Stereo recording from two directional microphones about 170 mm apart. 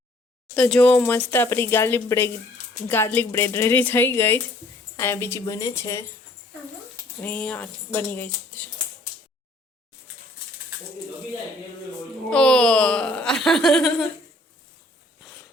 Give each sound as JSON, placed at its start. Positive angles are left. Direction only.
{"t": 0.5, "sound": "speech", "side_deg": 5}
{"t": 7.2, "sound": "speech", "side_deg": 10}
{"t": 12.3, "sound": "speech", "side_deg": 5}